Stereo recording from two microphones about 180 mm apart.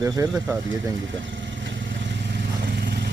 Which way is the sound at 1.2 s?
90° right.